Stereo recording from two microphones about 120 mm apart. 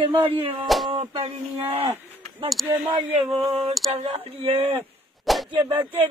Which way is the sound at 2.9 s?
55° right (ahead or behind).